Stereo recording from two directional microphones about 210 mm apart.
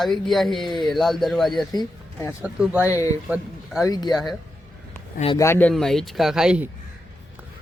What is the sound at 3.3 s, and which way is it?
Speech, 5° right (ahead or behind).